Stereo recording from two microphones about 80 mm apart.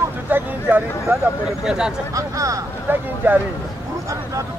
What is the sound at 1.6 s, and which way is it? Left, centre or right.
Speech, centre.